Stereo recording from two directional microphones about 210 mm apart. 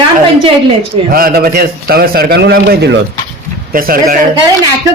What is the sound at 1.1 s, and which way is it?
A man's voice, 45° right (ahead or behind).